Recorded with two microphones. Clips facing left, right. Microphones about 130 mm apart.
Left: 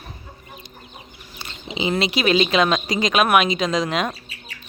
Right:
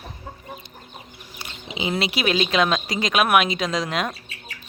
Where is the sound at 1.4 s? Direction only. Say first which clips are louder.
Left 3 dB; 5° right (ahead or behind).